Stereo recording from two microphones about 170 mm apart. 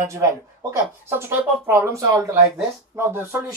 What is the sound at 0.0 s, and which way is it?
Speech, 15° right (ahead or behind).